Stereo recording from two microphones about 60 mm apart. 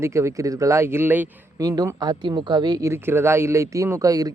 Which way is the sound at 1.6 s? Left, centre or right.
Right.